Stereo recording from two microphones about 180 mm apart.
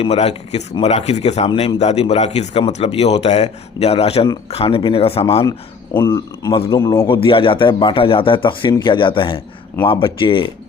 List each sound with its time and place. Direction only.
0.0 s speech: 35° left (ahead or behind)
6.0 s speech: 20° left (ahead or behind)
7.1 s speech: 30° left (ahead or behind)